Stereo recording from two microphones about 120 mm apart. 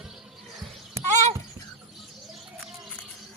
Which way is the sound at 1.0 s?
25° right (ahead or behind).